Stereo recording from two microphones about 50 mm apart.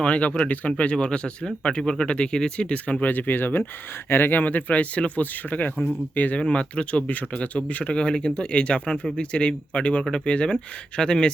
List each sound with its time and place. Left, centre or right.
0.0 s speech: left